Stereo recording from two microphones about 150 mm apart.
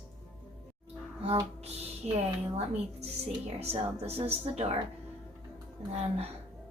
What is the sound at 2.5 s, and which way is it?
A woman's voice, 45° right (ahead or behind).